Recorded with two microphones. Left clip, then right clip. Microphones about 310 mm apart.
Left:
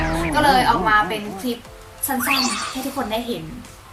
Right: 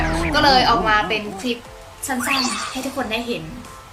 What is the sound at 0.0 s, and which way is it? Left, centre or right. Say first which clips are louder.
Speech: right 1 dB; centre.